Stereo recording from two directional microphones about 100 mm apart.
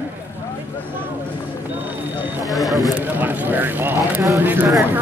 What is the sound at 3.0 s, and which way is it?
Speech, 20° right (ahead or behind).